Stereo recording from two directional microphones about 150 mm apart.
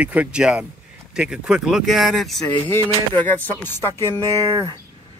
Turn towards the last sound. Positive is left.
turn(degrees=15)  # may be behind; listen again after turning